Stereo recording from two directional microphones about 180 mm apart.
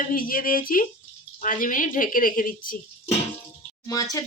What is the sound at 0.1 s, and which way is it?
Speech, 50° left (ahead or behind).